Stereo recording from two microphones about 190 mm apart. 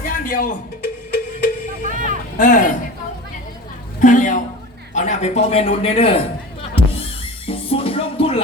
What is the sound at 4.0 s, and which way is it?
A man's voice, 40° left (ahead or behind).